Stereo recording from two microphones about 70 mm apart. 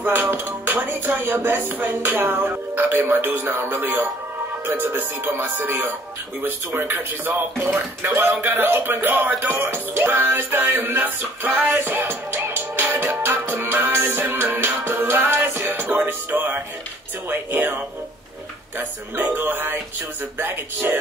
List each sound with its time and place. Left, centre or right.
0.0 s music: right